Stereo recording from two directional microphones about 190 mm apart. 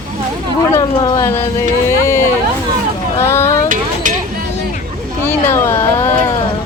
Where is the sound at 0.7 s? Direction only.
20° left (ahead or behind).